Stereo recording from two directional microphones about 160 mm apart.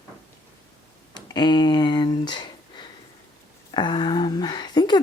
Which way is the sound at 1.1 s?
25° left (ahead or behind).